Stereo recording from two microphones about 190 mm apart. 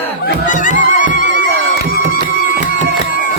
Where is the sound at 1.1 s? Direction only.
70° right (ahead or behind).